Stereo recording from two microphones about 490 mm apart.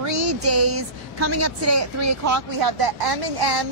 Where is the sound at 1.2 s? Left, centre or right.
Right.